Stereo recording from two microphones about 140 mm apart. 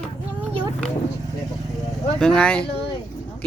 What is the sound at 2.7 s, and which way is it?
Speech, 40° left (ahead or behind).